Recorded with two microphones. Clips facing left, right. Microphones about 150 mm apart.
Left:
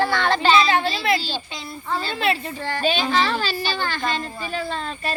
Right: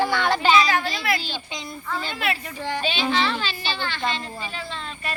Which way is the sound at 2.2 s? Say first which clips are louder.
Left 5 dB; 30° left (ahead or behind).